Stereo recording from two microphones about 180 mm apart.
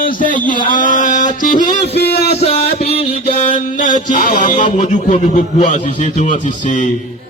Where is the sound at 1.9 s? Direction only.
65° left (ahead or behind).